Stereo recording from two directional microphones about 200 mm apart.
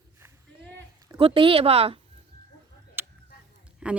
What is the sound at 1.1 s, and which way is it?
Speech, 25° right (ahead or behind).